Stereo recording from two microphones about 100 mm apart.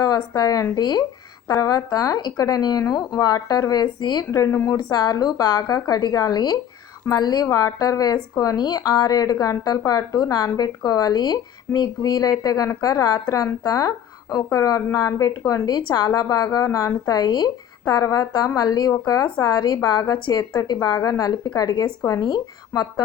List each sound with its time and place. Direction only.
0.0 s speech: 35° left (ahead or behind)
4.4 s speech: 30° left (ahead or behind)
4.8 s a woman's voice: 40° left (ahead or behind)
20.1 s speech: 55° left (ahead or behind)
20.7 s speech: 35° left (ahead or behind)